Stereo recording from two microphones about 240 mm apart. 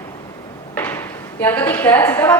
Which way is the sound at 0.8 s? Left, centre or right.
Centre.